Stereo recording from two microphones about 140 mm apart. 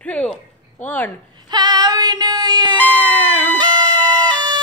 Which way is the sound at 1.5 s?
30° right (ahead or behind).